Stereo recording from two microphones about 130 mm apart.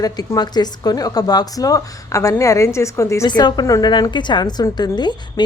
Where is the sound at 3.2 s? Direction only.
35° left (ahead or behind).